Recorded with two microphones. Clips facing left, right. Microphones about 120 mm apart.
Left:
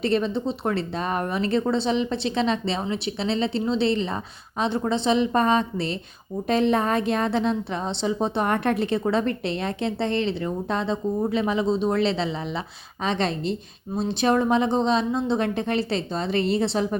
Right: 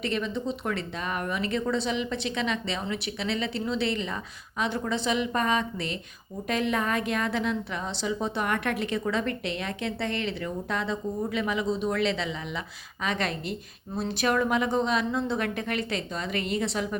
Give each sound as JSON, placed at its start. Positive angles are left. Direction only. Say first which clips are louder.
{"t": 0.0, "sound": "a woman's voice", "louder": "left 6 dB", "side_deg": 35}